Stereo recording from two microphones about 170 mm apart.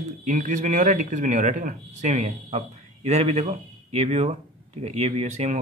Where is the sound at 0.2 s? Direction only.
45° right (ahead or behind).